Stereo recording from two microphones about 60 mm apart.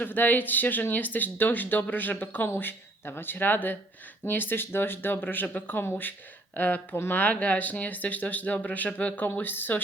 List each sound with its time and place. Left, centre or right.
0.0 s speech: left